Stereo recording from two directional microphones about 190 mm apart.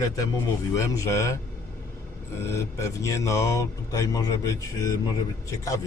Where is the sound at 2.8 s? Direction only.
15° left (ahead or behind).